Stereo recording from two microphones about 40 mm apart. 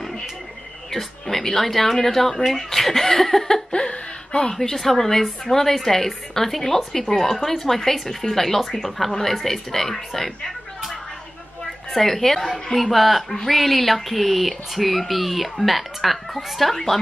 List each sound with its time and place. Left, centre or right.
0.9 s a woman's voice: centre
3.7 s speech: left
4.5 s a woman's voice: centre
11.9 s a woman's voice: centre